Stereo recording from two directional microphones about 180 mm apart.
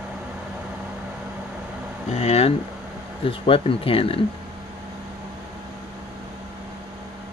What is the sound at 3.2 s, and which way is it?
Speech, 30° left (ahead or behind).